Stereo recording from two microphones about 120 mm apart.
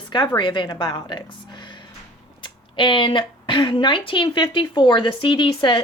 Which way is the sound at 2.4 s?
40° left (ahead or behind).